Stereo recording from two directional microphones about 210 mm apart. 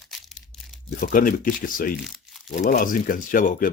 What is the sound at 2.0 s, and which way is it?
Crumpling, centre (ahead or behind).